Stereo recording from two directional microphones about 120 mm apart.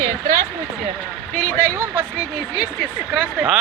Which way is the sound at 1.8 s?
20° right (ahead or behind).